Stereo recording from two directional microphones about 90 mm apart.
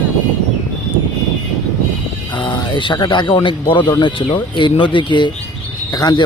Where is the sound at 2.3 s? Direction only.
55° left (ahead or behind).